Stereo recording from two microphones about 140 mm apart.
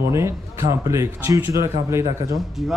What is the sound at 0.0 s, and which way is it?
A man's voice, 20° right (ahead or behind).